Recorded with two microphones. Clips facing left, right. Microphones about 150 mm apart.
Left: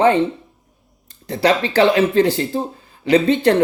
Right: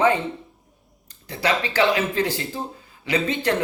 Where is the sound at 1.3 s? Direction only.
30° left (ahead or behind).